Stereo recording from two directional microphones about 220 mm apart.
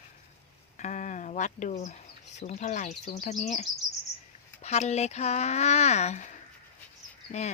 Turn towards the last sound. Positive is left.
turn(degrees=30)  # may be behind; listen again after turning